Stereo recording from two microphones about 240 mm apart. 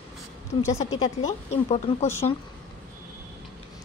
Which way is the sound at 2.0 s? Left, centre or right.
Centre.